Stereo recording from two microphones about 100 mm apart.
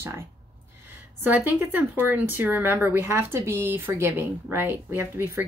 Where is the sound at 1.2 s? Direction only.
20° right (ahead or behind).